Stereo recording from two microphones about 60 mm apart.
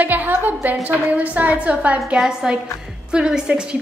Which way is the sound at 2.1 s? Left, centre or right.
Centre.